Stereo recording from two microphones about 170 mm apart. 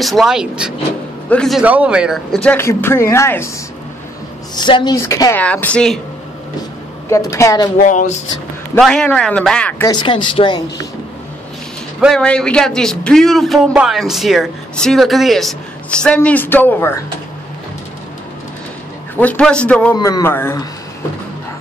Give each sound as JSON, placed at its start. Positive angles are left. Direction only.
{"t": 0.0, "sound": "speech", "side_deg": 0}
{"t": 1.6, "sound": "speech", "side_deg": -5}
{"t": 2.5, "sound": "speech", "side_deg": 15}
{"t": 4.6, "sound": "speech", "side_deg": 25}
{"t": 5.4, "sound": "speech", "side_deg": 5}
{"t": 7.1, "sound": "speech", "side_deg": 15}
{"t": 7.8, "sound": "speech", "side_deg": 50}
{"t": 8.7, "sound": "speech", "side_deg": 5}
{"t": 9.8, "sound": "speech", "side_deg": 25}
{"t": 12.0, "sound": "speech", "side_deg": 5}
{"t": 19.1, "sound": "speech", "side_deg": 10}
{"t": 20.0, "sound": "speech", "side_deg": 20}